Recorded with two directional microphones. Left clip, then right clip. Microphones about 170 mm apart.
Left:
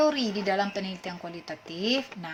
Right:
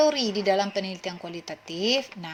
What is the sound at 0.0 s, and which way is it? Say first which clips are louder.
Speech: right 3 dB; 35° right (ahead or behind).